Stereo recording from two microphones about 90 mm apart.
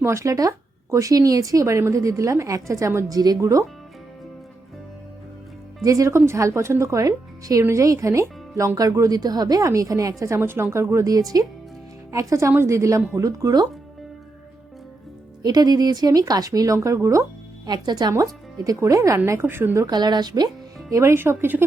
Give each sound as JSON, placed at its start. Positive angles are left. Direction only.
{"t": 0.0, "sound": "speech", "side_deg": -35}
{"t": 3.2, "sound": "speech", "side_deg": -45}
{"t": 5.8, "sound": "speech", "side_deg": -35}
{"t": 15.4, "sound": "speech", "side_deg": -45}
{"t": 17.7, "sound": "speech", "side_deg": -50}
{"t": 19.8, "sound": "speech", "side_deg": -50}
{"t": 20.9, "sound": "speech", "side_deg": -30}